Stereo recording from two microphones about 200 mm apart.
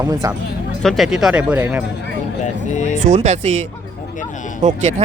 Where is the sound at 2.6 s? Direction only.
35° left (ahead or behind).